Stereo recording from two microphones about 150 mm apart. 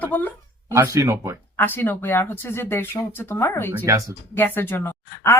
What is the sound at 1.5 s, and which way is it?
Speech, 15° left (ahead or behind).